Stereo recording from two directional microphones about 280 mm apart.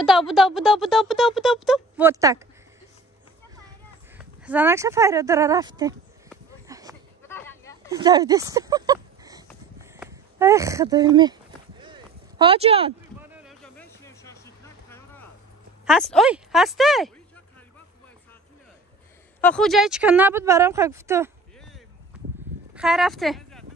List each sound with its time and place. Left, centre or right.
0.0 s speech: centre
4.2 s speech: centre
6.7 s sheep: centre
7.2 s a sound: centre
7.9 s speech: centre
11.8 s a sound: centre
13.2 s a sound: centre
15.8 s speech: centre
19.4 s speech: centre
22.8 s speech: centre